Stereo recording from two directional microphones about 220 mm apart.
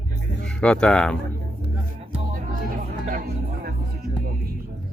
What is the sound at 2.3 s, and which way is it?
Chatter, 40° right (ahead or behind).